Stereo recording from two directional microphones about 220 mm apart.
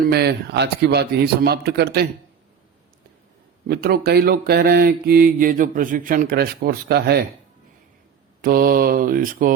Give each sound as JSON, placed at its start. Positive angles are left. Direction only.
{"t": 0.0, "sound": "mantra", "side_deg": -45}
{"t": 3.7, "sound": "mantra", "side_deg": -45}
{"t": 8.4, "sound": "mantra", "side_deg": -40}